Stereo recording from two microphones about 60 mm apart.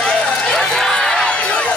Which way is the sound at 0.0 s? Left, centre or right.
Centre.